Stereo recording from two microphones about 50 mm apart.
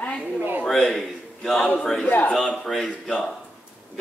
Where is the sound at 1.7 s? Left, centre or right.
Centre.